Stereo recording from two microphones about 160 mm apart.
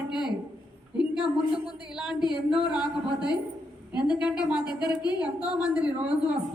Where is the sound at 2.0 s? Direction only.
5° right (ahead or behind).